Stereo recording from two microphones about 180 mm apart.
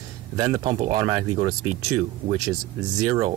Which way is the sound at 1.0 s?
20° right (ahead or behind).